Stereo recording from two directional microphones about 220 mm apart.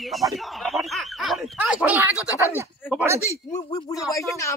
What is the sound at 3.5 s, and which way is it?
Speech, 15° left (ahead or behind).